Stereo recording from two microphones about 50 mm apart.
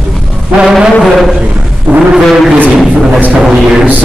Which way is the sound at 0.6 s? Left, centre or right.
Centre.